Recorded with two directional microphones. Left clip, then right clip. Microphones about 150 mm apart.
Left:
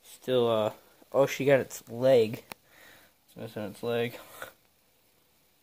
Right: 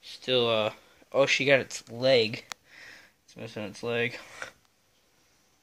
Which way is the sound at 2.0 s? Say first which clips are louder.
Left 1 dB; 30° left (ahead or behind).